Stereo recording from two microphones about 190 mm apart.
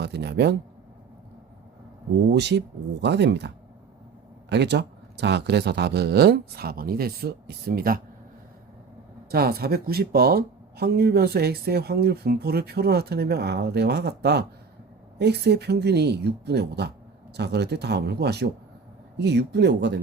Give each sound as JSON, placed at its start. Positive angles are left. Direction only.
{"t": 0.0, "sound": "speech", "side_deg": -60}
{"t": 2.3, "sound": "speech", "side_deg": -65}
{"t": 9.3, "sound": "speech", "side_deg": -55}